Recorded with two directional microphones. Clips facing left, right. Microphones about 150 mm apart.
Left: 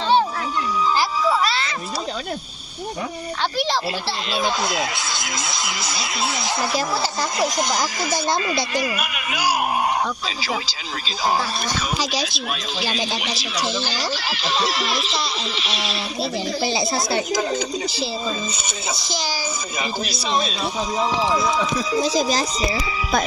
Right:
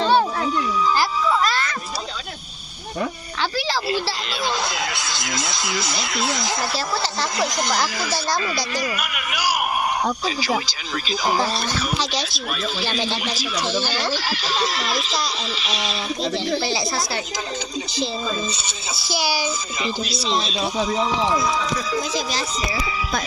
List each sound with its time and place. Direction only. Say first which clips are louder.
4.7 s speech: left 2 dB; 25° left (ahead or behind)
6.6 s speech: left 2 dB; 10° left (ahead or behind)
12.8 s speech: left 2 dB; 15° left (ahead or behind)
13.6 s speech: right 1 dB; 35° left (ahead or behind)
14.8 s speech: even; centre (ahead or behind)
16.6 s speech: left 2 dB; 20° left (ahead or behind)
19.1 s a child's voice: right 6 dB; 10° right (ahead or behind)
20.2 s speech: left 2 dB; 50° left (ahead or behind)
21.9 s speech: left 5 dB; 35° left (ahead or behind)